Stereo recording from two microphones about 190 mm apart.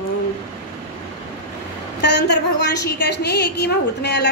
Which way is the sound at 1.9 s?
65° left (ahead or behind).